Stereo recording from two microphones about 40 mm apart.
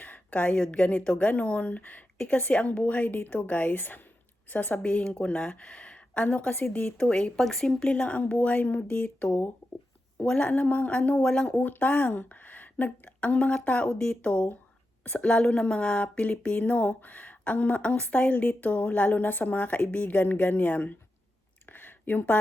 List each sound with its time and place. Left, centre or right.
0.0 s a sound: left
0.5 s speech: left
1.8 s speech: left
2.5 s speech: left
3.8 s a woman's voice: left
4.8 s speech: left
5.6 s a sound: left
6.2 s speech: left
7.3 s speech: centre
7.9 s speech: left
11.3 s speech: left
11.5 s a woman's voice: left
15.3 s a woman's voice: left
21.7 s a sound: left